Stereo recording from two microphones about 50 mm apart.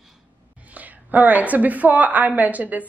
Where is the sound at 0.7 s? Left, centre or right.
Right.